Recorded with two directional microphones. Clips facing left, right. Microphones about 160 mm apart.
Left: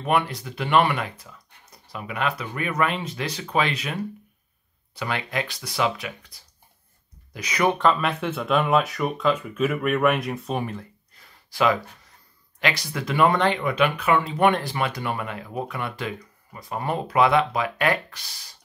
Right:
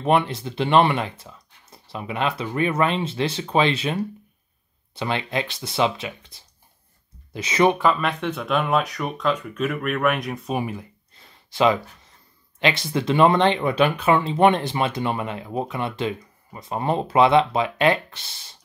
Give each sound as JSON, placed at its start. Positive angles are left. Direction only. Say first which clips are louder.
{"t": 0.0, "sound": "speech", "louder": "right 3 dB", "side_deg": -25}
{"t": 7.8, "sound": "speech", "louder": "even", "side_deg": 0}
{"t": 10.6, "sound": "speech", "louder": "right 2 dB", "side_deg": -10}
{"t": 11.1, "sound": "a sound", "louder": "right 3 dB", "side_deg": -25}
{"t": 12.5, "sound": "speech", "louder": "right 4 dB", "side_deg": -25}